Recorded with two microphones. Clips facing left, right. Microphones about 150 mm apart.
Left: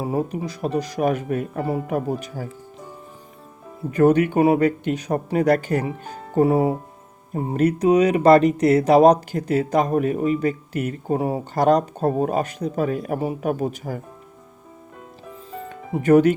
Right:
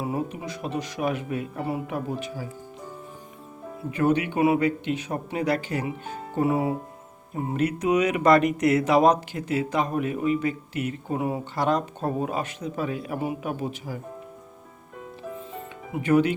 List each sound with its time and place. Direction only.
0.0 s speech: 35° left (ahead or behind)
3.9 s speech: 45° left (ahead or behind)
15.7 s music: 40° left (ahead or behind)